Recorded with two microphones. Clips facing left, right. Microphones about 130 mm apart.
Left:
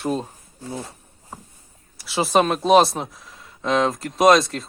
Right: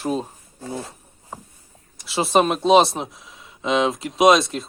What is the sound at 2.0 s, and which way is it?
Speech, centre (ahead or behind).